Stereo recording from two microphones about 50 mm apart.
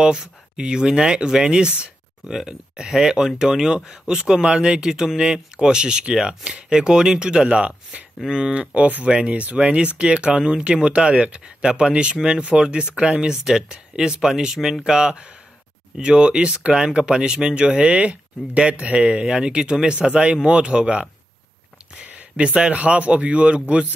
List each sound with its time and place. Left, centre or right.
0.0 s speech: centre
22.4 s speech: right